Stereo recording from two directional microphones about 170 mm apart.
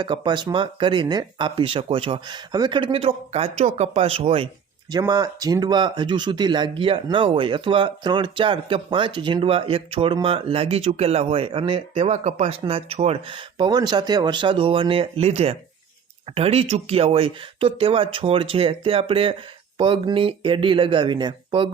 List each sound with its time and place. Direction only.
0.0 s speech: 25° right (ahead or behind)